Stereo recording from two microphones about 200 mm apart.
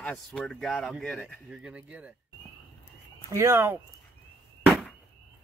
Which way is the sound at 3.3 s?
10° right (ahead or behind).